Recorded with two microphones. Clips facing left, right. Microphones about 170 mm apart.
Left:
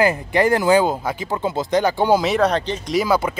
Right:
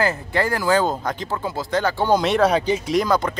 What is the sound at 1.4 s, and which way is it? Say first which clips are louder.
Speech: left 6 dB; 20° left (ahead or behind).